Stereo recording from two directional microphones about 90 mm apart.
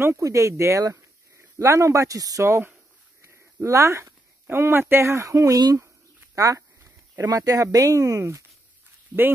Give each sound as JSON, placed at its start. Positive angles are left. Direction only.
{"t": 0.0, "sound": "speech", "side_deg": -35}
{"t": 6.3, "sound": "a sound", "side_deg": -35}
{"t": 7.2, "sound": "speech", "side_deg": -40}